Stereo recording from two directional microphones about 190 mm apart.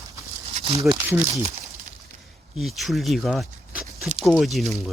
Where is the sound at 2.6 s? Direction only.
Centre (ahead or behind).